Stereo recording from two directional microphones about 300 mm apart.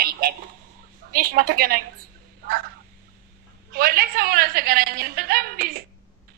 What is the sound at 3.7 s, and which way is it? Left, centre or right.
A woman's voice, right.